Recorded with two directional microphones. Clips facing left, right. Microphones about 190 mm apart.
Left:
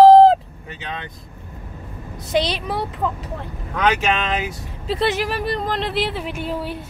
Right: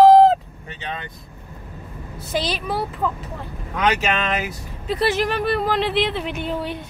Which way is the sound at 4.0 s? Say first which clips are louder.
Left 1 dB; centre (ahead or behind).